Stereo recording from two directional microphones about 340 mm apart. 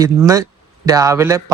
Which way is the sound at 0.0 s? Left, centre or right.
Centre.